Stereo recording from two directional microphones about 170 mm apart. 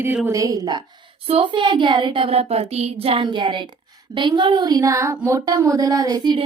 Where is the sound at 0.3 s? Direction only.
20° right (ahead or behind).